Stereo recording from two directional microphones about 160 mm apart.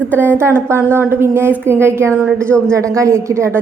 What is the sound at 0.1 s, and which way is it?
A woman's voice, 15° right (ahead or behind).